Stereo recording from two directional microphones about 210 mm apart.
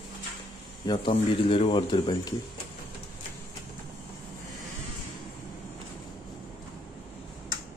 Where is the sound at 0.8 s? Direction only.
25° left (ahead or behind).